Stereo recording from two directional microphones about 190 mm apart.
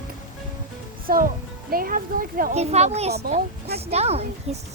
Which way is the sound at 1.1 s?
50° right (ahead or behind).